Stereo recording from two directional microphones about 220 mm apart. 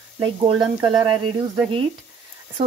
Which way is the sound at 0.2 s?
20° right (ahead or behind).